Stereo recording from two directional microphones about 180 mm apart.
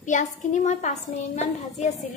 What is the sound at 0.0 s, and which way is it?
A woman's voice, 45° left (ahead or behind).